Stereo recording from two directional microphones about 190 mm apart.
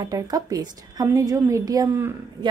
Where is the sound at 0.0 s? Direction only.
20° right (ahead or behind).